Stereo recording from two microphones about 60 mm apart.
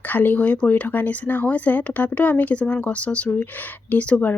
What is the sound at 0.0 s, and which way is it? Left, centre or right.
Speech, left.